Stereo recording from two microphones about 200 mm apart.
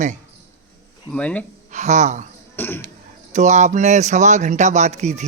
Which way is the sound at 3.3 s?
35° right (ahead or behind).